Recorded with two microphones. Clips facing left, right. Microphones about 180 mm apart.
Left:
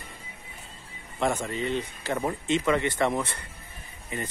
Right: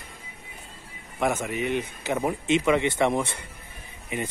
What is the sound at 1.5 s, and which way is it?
Speech, 15° right (ahead or behind).